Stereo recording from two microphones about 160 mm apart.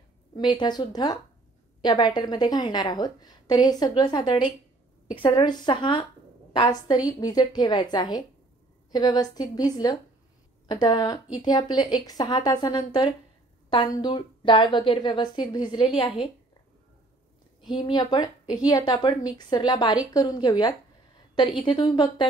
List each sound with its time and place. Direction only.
0.4 s a woman's voice: 30° left (ahead or behind)
17.7 s a woman's voice: 30° left (ahead or behind)